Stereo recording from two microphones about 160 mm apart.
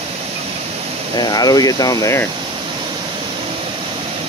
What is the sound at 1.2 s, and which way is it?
Speech, 25° left (ahead or behind).